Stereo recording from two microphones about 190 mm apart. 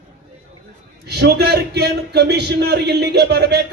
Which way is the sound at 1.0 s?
60° right (ahead or behind).